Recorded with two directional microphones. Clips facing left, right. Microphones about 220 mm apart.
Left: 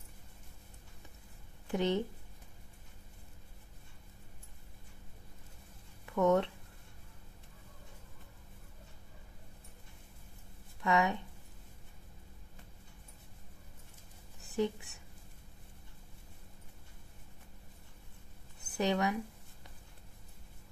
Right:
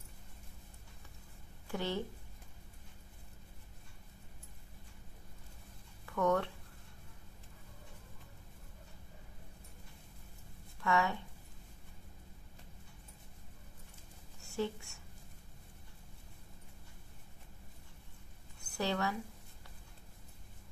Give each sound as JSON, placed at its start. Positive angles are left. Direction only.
{"t": 1.7, "sound": "speech", "side_deg": 20}
{"t": 6.0, "sound": "speech", "side_deg": 20}
{"t": 10.8, "sound": "speech", "side_deg": 20}
{"t": 14.5, "sound": "speech", "side_deg": 20}
{"t": 18.7, "sound": "speech", "side_deg": 20}